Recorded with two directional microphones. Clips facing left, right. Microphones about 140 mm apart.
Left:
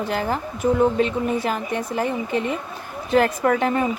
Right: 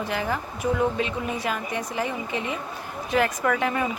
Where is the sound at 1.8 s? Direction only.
50° left (ahead or behind).